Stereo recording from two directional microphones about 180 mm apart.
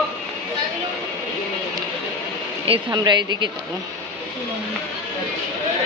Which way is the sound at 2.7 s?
25° right (ahead or behind).